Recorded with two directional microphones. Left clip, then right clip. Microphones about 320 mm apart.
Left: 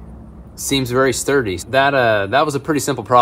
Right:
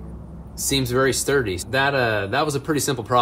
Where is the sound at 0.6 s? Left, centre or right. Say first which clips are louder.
Left 4 dB; centre.